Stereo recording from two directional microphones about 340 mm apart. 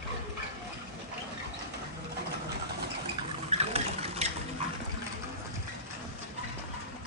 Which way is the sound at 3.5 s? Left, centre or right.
Centre.